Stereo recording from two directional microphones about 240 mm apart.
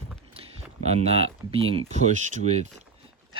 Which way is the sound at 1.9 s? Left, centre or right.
Right.